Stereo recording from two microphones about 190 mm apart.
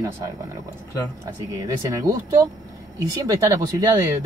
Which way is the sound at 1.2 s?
15° right (ahead or behind).